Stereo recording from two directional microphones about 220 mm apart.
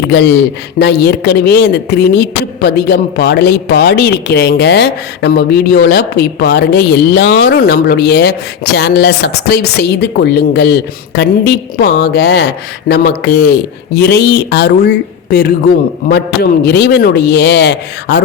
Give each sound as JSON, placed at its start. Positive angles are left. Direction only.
{"t": 0.1, "sound": "speech", "side_deg": 50}